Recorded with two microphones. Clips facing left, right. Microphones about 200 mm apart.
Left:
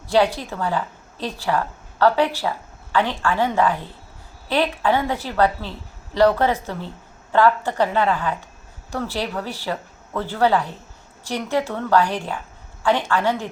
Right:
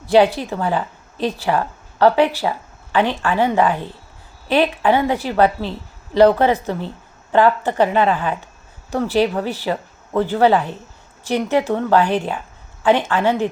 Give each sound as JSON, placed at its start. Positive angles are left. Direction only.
{"t": 0.3, "sound": "a woman's voice", "side_deg": -15}